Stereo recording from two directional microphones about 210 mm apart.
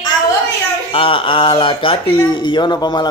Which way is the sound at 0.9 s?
25° left (ahead or behind).